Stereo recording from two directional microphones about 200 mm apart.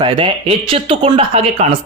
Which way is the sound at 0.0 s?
25° right (ahead or behind).